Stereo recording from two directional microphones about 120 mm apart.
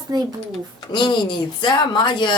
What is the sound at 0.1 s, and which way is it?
Speech, 35° right (ahead or behind).